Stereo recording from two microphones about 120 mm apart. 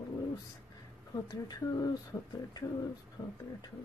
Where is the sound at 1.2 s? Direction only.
35° left (ahead or behind).